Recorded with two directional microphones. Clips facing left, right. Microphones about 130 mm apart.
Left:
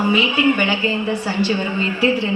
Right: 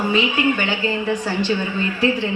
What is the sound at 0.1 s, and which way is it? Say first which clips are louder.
A woman's voice: left 1 dB; 15° left (ahead or behind).